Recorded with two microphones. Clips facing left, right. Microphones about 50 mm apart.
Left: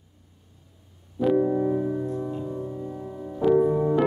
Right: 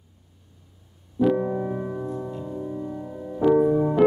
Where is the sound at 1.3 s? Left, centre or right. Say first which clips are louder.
Left 3 dB; centre.